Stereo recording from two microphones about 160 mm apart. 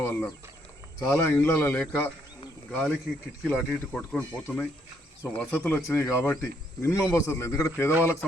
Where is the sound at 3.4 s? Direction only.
10° left (ahead or behind).